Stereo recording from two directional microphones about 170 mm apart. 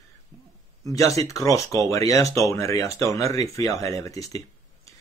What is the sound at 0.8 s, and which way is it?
Speech, 20° left (ahead or behind).